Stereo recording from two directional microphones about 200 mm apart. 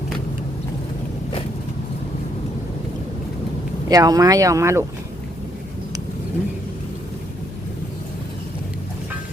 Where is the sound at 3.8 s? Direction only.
20° right (ahead or behind).